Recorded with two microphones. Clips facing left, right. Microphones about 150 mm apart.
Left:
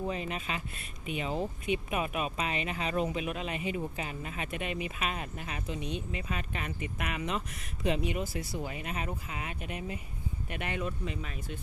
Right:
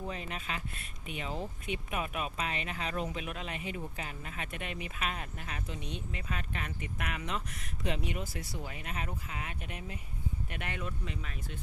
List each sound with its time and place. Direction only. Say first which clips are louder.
0.1 s speech: left 4 dB; 10° left (ahead or behind)